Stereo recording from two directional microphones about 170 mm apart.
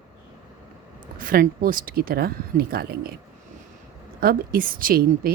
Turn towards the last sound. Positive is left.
turn(degrees=-60)  # may be behind; listen again after turning